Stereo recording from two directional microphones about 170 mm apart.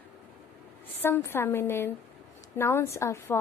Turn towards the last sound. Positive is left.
turn(degrees=15)  # may be behind; listen again after turning